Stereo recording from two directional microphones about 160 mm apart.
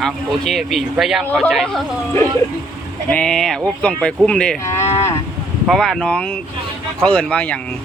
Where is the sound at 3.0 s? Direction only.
5° left (ahead or behind).